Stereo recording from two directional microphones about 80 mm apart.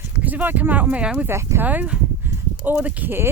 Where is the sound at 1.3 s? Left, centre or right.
Right.